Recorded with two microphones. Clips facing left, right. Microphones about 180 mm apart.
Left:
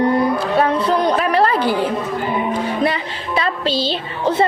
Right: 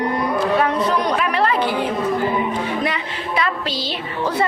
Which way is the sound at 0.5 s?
30° left (ahead or behind).